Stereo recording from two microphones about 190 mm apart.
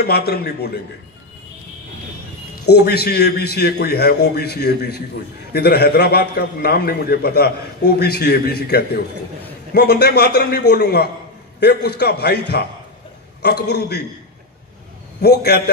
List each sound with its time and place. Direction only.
0.0 s a man's voice: 55° left (ahead or behind)
2.6 s a man's voice: 60° left (ahead or behind)
15.2 s a man's voice: 55° left (ahead or behind)